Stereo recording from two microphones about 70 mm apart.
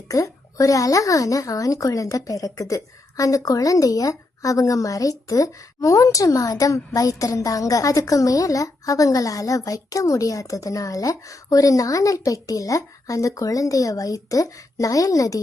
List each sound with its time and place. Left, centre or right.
0.1 s a woman's voice: left